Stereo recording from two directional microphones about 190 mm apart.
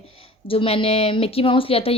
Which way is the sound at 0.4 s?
30° left (ahead or behind).